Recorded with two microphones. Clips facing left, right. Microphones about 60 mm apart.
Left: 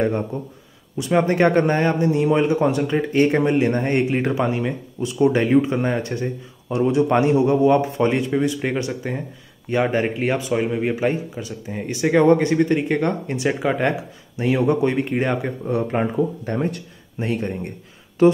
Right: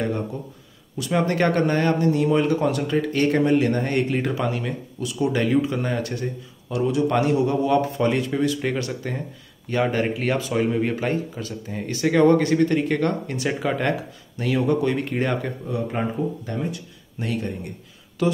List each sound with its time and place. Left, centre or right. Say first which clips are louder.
0.0 s speech: left 4 dB; left
16.0 s speech: left 4 dB; left
17.2 s speech: left 3 dB; left